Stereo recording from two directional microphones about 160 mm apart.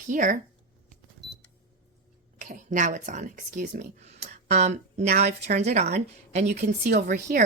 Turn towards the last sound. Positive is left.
turn(degrees=-55)  # may be behind; listen again after turning